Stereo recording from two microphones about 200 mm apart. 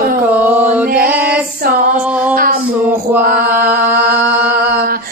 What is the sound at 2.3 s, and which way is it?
Music, 45° right (ahead or behind).